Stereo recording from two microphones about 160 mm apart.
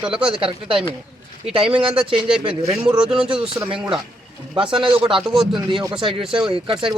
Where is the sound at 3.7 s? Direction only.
30° right (ahead or behind).